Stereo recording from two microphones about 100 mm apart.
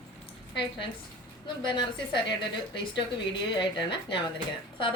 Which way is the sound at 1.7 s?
50° left (ahead or behind).